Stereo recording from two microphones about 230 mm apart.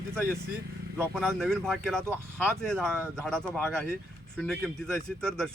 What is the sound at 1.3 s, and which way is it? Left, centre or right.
Speech, centre.